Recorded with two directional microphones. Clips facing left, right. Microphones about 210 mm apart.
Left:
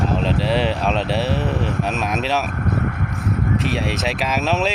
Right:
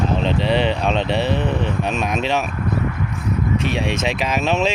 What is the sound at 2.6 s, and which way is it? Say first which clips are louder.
Vehicle: even; 55° left (ahead or behind).